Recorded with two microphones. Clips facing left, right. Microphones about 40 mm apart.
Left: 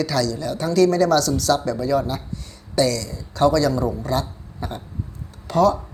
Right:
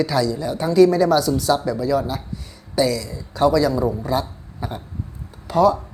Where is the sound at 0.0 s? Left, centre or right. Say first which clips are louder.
Right 2 dB; centre.